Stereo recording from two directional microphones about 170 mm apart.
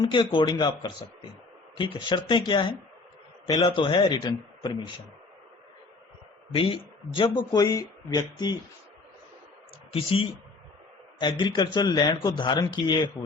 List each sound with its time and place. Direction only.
0.0 s speech: 30° left (ahead or behind)
6.5 s speech: 30° left (ahead or behind)
9.9 s speech: 35° left (ahead or behind)